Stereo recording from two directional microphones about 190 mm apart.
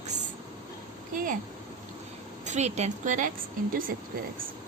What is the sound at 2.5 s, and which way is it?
Speech, 35° right (ahead or behind).